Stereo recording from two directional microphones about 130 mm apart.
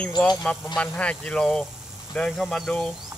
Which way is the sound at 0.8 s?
10° left (ahead or behind).